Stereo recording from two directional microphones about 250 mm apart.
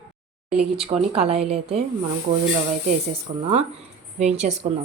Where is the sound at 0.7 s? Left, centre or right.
Right.